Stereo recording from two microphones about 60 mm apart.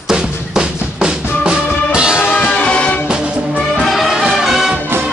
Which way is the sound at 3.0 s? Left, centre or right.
Centre.